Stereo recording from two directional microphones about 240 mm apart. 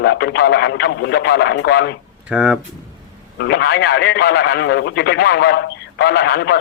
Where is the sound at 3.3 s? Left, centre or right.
Left.